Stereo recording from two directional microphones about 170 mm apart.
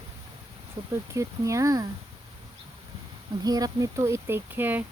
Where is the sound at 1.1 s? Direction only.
20° right (ahead or behind).